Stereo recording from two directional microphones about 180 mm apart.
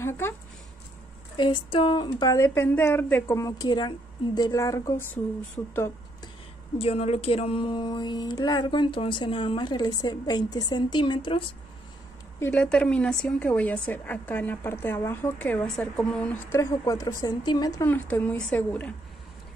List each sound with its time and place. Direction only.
1.3 s a woman's voice: 25° left (ahead or behind)
6.8 s speech: 35° left (ahead or behind)
12.4 s a woman's voice: 15° left (ahead or behind)